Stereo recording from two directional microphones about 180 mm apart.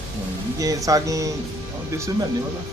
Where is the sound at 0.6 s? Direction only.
20° right (ahead or behind).